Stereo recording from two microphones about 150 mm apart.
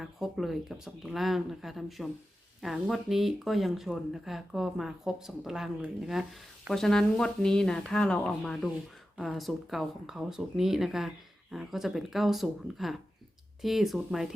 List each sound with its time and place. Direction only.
0.0 s speech: centre (ahead or behind)